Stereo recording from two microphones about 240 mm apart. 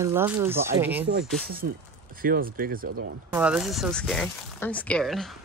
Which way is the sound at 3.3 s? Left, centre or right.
Centre.